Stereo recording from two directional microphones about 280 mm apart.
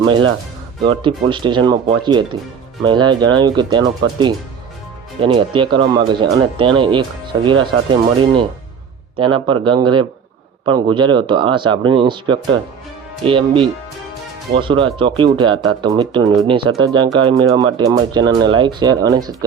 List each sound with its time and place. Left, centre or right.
0.0 s speech: centre
9.1 s speech: centre